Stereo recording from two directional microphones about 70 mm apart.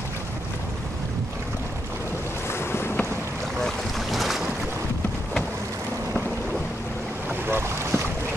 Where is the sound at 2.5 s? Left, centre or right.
Left.